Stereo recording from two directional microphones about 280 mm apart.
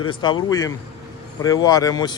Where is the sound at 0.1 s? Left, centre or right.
Centre.